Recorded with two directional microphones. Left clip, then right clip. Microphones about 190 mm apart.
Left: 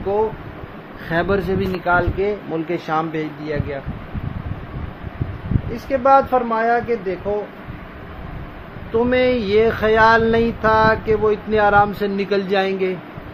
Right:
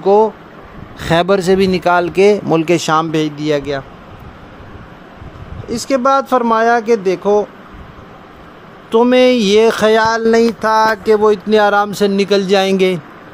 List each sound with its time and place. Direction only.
1.1 s speech: 65° right (ahead or behind)
5.7 s speech: 70° right (ahead or behind)
8.9 s speech: 75° right (ahead or behind); by 10.0 s 55° right (ahead or behind)
10.0 s music: 35° right (ahead or behind); by 12.9 s 60° right (ahead or behind)